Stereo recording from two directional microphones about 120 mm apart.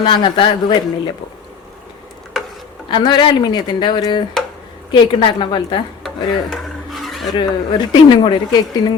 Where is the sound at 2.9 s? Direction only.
40° left (ahead or behind).